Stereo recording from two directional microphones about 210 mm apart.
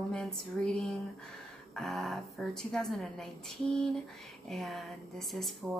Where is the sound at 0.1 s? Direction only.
5° left (ahead or behind).